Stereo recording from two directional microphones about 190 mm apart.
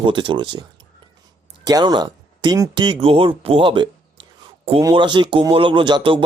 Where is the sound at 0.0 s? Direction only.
25° right (ahead or behind).